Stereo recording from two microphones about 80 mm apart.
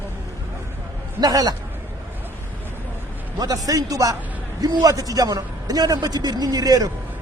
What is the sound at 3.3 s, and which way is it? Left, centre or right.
A man's voice, right.